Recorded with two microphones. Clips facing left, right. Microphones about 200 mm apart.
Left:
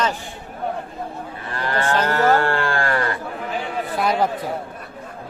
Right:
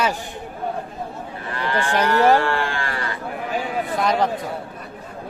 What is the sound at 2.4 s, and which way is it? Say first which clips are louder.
Livestock: left 2 dB; 50° left (ahead or behind).